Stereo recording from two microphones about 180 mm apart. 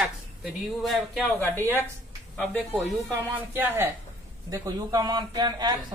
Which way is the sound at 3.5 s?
10° right (ahead or behind).